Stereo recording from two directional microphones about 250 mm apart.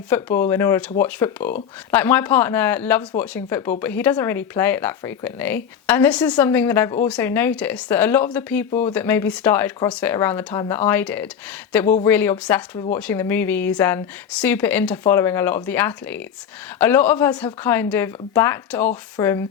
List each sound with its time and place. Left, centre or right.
0.1 s speech: centre